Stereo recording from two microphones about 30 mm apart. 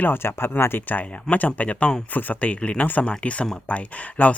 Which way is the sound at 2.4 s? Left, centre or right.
Left.